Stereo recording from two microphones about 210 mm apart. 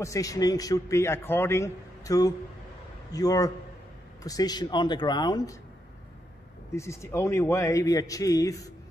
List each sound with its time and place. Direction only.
0.0 s a man's voice: 15° left (ahead or behind)
6.7 s a man's voice: 15° left (ahead or behind)